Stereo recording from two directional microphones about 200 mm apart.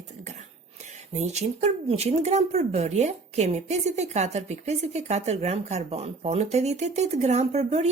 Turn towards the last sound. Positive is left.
turn(degrees=-35)  # may be behind; listen again after turning